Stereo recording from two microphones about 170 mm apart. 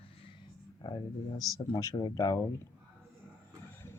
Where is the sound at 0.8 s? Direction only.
25° left (ahead or behind).